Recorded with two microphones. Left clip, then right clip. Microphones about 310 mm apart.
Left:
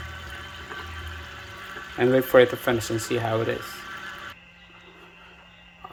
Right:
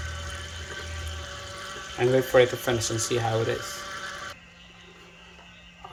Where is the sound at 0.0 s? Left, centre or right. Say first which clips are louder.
Right 1 dB; centre.